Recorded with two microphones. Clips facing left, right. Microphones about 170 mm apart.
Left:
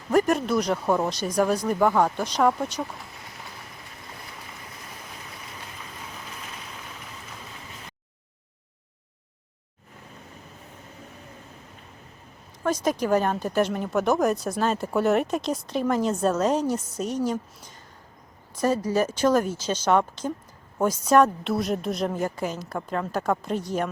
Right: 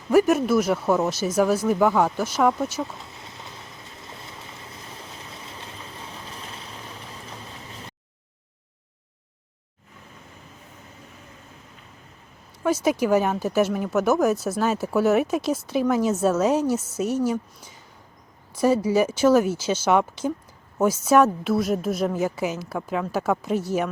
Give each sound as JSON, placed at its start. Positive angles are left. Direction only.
{"t": 0.1, "sound": "speech", "side_deg": -5}
{"t": 2.8, "sound": "a sound", "side_deg": -25}
{"t": 4.2, "sound": "boat", "side_deg": -25}
{"t": 12.6, "sound": "a woman's voice", "side_deg": -10}